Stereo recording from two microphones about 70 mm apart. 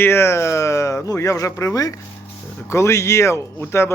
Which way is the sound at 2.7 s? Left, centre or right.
Left.